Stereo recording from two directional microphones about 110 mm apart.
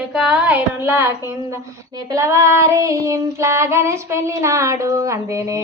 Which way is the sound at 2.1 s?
25° right (ahead or behind).